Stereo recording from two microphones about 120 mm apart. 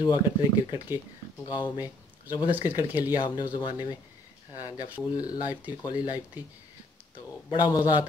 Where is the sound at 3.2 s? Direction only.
35° left (ahead or behind).